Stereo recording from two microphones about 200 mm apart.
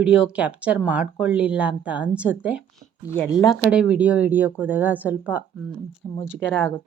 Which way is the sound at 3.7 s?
5° right (ahead or behind).